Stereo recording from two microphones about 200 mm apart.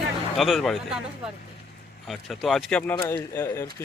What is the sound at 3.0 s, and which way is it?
Speech, 15° left (ahead or behind).